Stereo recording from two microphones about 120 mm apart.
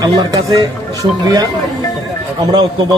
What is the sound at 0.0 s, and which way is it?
A man's voice, 35° right (ahead or behind).